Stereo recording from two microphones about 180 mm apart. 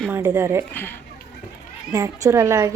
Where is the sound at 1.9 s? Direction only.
15° right (ahead or behind).